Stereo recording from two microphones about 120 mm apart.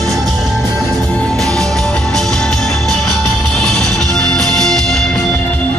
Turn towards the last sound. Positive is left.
turn(degrees=5)  # may be behind; listen again after turning